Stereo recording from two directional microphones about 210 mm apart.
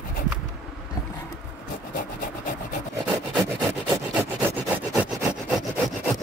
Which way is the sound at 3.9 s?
5° right (ahead or behind).